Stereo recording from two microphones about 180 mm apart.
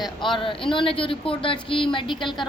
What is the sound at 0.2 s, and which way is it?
A woman's voice, 25° left (ahead or behind).